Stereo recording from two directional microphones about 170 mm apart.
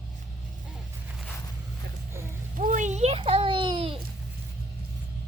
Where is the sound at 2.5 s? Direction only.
50° right (ahead or behind); by 4.0 s 30° right (ahead or behind).